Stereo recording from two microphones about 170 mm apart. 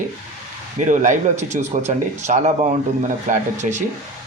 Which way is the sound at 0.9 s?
50° right (ahead or behind).